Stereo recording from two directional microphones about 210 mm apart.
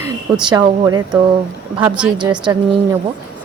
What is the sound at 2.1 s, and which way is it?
Speech, 20° right (ahead or behind).